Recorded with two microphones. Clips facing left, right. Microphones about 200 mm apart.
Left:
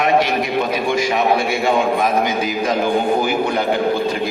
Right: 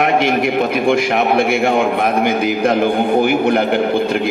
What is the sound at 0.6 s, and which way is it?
A man's voice, 55° right (ahead or behind).